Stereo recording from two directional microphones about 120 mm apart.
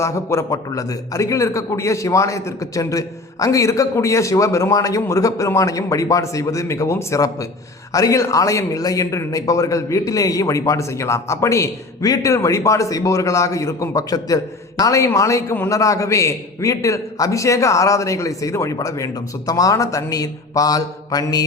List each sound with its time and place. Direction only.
0.0 s a man's voice: 25° left (ahead or behind)